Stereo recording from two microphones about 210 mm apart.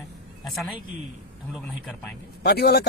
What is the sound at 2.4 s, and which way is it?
Speech, 50° left (ahead or behind).